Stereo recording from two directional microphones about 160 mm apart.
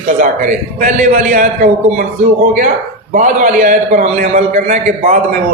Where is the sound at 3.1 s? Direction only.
55° right (ahead or behind).